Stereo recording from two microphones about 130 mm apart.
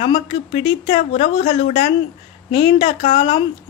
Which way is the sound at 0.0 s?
45° left (ahead or behind).